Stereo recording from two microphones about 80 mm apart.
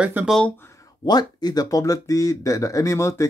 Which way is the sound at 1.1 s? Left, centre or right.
Left.